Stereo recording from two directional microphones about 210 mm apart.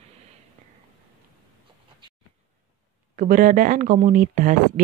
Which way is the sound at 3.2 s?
40° right (ahead or behind).